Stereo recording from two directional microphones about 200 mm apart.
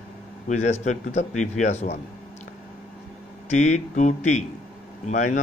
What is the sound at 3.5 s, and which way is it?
Speech, 35° left (ahead or behind).